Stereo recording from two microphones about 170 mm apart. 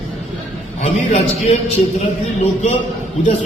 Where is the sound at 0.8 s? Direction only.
40° left (ahead or behind).